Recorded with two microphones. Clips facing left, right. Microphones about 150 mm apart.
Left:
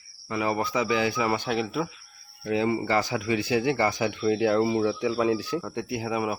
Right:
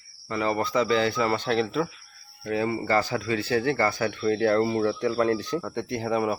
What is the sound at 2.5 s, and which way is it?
Speech, 20° left (ahead or behind).